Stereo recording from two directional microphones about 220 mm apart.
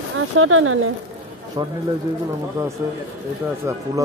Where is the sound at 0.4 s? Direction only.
70° right (ahead or behind).